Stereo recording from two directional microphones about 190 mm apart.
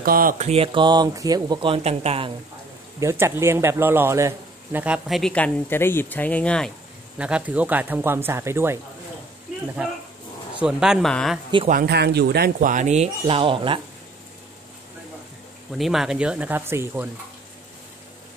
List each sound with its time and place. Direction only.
0.0 s speech: 50° right (ahead or behind)
0.5 s speech: 30° right (ahead or behind)
3.0 s speech: 15° right (ahead or behind); by 6.7 s 5° left (ahead or behind)
7.2 s speech: 5° right (ahead or behind)
10.6 s speech: 5° right (ahead or behind)
11.7 s speech: 55° right (ahead or behind); by 13.7 s 25° right (ahead or behind)
15.8 s speech: centre (ahead or behind)